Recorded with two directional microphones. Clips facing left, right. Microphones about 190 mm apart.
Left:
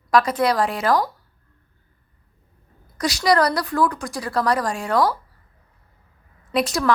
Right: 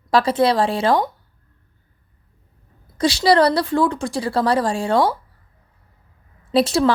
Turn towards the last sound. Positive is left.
turn(degrees=-30)  # may be behind; listen again after turning